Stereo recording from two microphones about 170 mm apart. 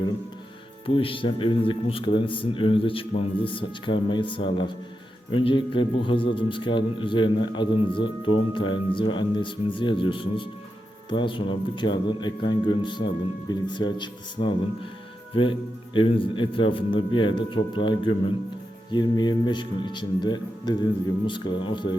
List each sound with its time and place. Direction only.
0.9 s a man's voice: 30° left (ahead or behind)